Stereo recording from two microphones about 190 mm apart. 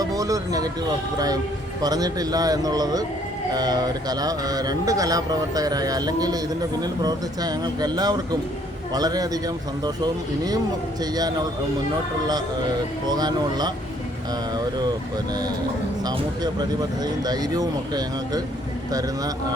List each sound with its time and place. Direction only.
0.0 s music: 20° right (ahead or behind)
1.8 s speech: 20° right (ahead or behind)
13.1 s speech: 20° right (ahead or behind)
16.0 s speech: 20° right (ahead or behind)